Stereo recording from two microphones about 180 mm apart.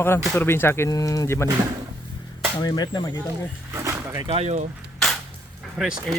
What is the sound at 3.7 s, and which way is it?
Dog, 15° right (ahead or behind).